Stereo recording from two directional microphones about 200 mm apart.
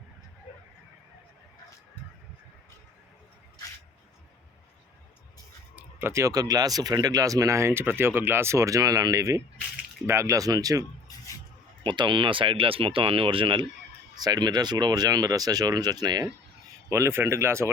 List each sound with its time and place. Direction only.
5.7 s speech: 10° right (ahead or behind)